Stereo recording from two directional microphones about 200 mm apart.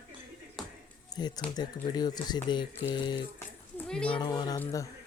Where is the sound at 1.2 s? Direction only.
20° left (ahead or behind).